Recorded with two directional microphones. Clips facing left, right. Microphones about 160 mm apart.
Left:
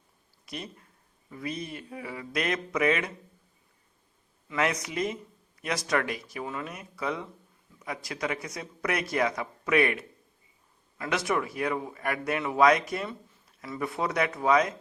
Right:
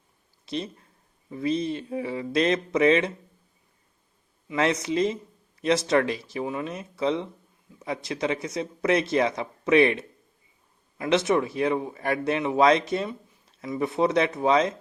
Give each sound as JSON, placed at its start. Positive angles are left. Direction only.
{"t": 0.4, "sound": "speech", "side_deg": -25}
{"t": 4.4, "sound": "speech", "side_deg": -25}